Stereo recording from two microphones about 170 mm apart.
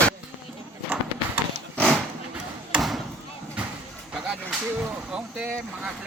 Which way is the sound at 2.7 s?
Centre (ahead or behind).